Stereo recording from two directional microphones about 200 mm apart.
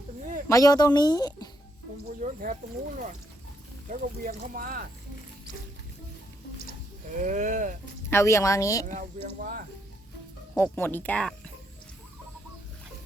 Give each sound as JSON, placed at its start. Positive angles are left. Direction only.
{"t": 0.4, "sound": "speech", "side_deg": 15}
{"t": 2.2, "sound": "speech", "side_deg": -40}
{"t": 3.8, "sound": "speech", "side_deg": -45}
{"t": 7.2, "sound": "speech", "side_deg": -40}
{"t": 8.1, "sound": "speech", "side_deg": 15}
{"t": 8.9, "sound": "speech", "side_deg": -40}
{"t": 10.6, "sound": "speech", "side_deg": 10}